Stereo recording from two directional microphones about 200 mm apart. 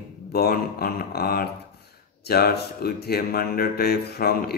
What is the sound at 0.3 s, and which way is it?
Speech, 50° left (ahead or behind).